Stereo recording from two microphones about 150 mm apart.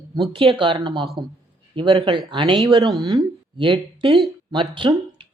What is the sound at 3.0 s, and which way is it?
A woman's voice, 30° right (ahead or behind).